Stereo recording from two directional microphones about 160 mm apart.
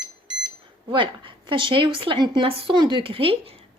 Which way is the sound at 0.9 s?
30° right (ahead or behind).